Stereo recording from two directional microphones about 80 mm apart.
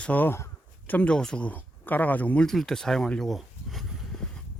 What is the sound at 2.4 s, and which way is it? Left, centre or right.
Speech, centre.